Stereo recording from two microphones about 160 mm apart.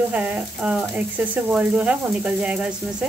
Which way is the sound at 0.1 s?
10° right (ahead or behind).